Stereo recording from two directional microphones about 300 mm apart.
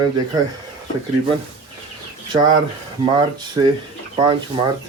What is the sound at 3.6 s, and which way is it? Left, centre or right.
Speech, centre.